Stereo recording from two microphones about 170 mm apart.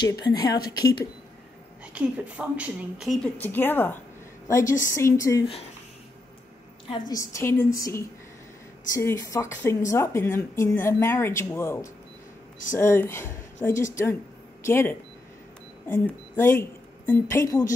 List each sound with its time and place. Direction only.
0.0 s a woman's voice: 25° left (ahead or behind)
2.0 s speech: 10° right (ahead or behind)
3.3 s a woman's voice: 10° left (ahead or behind)
6.9 s a woman's voice: 20° left (ahead or behind)